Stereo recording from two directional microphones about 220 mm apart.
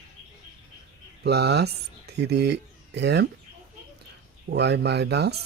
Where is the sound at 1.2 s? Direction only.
50° right (ahead or behind).